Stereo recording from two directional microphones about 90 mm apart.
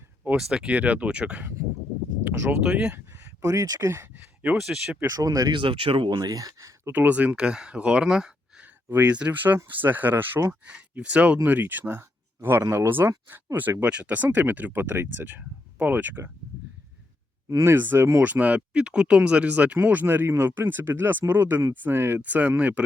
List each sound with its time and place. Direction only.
0.3 s speech: 5° right (ahead or behind)
2.9 s a sound: 25° right (ahead or behind)
3.5 s speech: 40° right (ahead or behind); by 4.5 s 20° right (ahead or behind)
4.6 s speech: 5° right (ahead or behind)
5.1 s speech: 40° right (ahead or behind)
5.5 s speech: 70° right (ahead or behind)
6.1 s speech: 45° right (ahead or behind)
6.9 s speech: 20° right (ahead or behind)
8.6 s speech: 20° right (ahead or behind)
17.5 s speech: 35° right (ahead or behind)
18.2 s speech: 15° right (ahead or behind)